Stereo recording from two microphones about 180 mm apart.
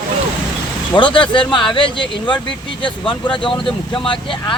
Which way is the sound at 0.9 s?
25° left (ahead or behind).